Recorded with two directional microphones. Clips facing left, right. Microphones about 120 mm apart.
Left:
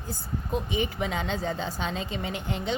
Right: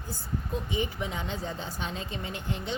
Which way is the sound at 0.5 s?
80° left.